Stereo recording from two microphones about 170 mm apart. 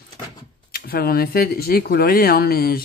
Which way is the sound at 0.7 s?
60° left (ahead or behind).